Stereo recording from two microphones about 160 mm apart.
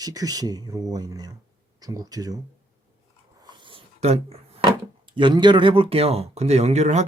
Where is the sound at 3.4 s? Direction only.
30° right (ahead or behind).